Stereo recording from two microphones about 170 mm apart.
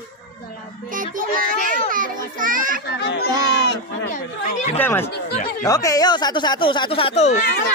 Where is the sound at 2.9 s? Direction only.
75° left (ahead or behind).